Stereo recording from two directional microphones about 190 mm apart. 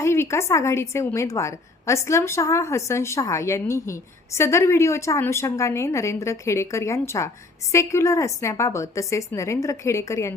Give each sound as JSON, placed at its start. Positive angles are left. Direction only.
{"t": 0.0, "sound": "a woman's voice", "side_deg": 15}